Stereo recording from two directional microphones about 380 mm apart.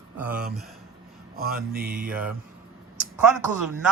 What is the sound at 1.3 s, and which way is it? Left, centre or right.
Mantra, right.